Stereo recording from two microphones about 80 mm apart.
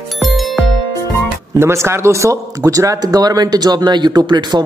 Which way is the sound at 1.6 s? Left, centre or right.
Right.